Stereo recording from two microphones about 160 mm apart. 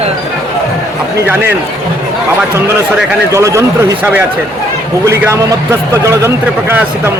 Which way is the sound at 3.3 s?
20° right (ahead or behind).